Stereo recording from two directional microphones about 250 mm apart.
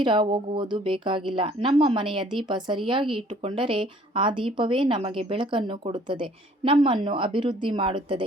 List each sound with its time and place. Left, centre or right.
0.0 s a woman's voice: centre